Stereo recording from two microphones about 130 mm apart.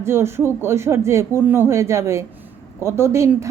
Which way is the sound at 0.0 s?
20° right (ahead or behind).